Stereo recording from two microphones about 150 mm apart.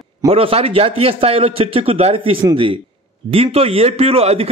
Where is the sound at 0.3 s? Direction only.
40° right (ahead or behind).